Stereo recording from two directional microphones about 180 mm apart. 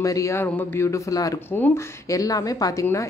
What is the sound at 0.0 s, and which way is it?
Speech, 15° left (ahead or behind).